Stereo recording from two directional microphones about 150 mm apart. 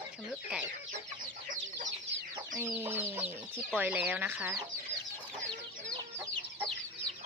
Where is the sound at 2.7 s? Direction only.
15° right (ahead or behind).